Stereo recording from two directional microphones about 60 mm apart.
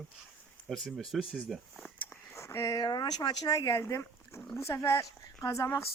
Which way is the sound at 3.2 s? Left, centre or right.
Left.